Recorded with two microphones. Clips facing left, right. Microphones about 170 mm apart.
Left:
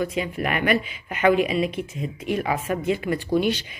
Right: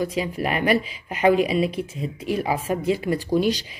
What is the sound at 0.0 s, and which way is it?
Speech, 35° right (ahead or behind).